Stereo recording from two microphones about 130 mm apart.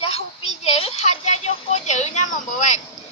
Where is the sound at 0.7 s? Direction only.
50° left (ahead or behind); by 2.8 s 70° left (ahead or behind).